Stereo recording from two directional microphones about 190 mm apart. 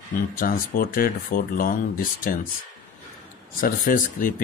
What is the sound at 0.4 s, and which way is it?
Speech, 50° left (ahead or behind).